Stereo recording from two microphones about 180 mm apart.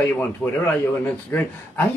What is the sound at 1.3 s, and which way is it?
Speech, 10° left (ahead or behind).